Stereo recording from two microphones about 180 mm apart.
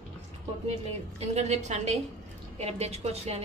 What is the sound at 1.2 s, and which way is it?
A woman's voice, 40° right (ahead or behind).